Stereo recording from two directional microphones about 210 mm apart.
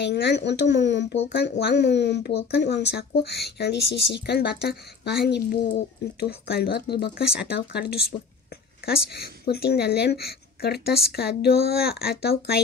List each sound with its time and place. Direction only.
0.0 s speech: 55° left (ahead or behind)